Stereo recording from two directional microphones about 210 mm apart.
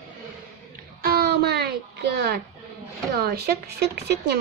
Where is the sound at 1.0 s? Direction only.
50° right (ahead or behind).